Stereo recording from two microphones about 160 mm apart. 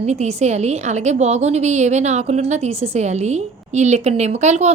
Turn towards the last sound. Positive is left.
turn(degrees=-45)  # may be behind; listen again after turning